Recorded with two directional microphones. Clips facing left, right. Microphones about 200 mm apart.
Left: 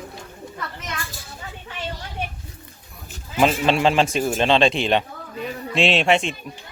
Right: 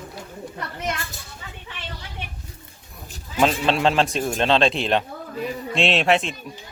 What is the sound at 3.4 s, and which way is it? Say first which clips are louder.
A man's voice: left 1 dB; centre (ahead or behind).